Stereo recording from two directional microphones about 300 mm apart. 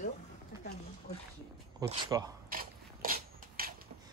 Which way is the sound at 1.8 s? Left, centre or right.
Centre.